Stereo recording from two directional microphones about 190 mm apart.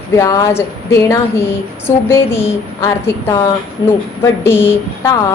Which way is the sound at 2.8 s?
10° left (ahead or behind).